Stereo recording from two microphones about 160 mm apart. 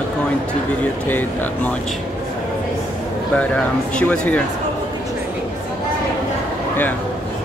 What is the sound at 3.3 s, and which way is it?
Speech, 5° left (ahead or behind).